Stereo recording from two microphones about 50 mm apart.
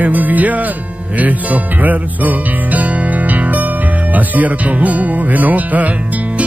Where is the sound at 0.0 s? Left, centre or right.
Right.